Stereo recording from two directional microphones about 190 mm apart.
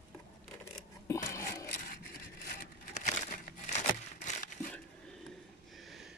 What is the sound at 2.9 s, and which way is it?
Crumpling, 40° left (ahead or behind).